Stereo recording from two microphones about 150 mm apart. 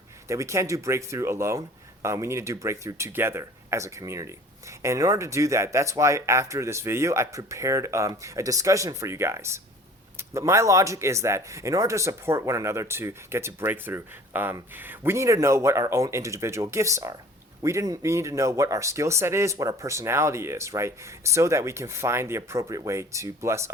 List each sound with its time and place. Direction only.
0.3 s speech: 20° right (ahead or behind)